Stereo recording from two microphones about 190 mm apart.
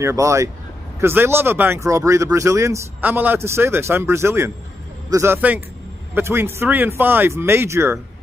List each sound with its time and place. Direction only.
0.0 s speech: 15° right (ahead or behind)